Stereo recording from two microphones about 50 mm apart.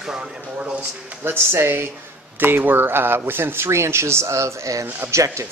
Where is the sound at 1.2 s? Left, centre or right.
Right.